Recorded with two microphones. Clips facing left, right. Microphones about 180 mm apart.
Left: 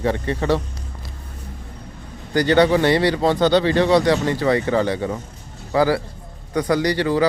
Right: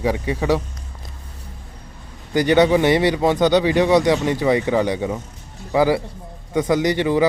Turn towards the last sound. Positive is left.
turn(degrees=-20)  # may be behind; listen again after turning